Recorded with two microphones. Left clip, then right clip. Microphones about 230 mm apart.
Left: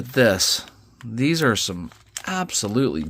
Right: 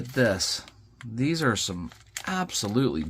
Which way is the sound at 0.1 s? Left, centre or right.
Left.